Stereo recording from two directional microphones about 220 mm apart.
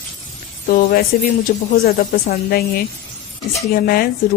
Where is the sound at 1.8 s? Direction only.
45° left (ahead or behind).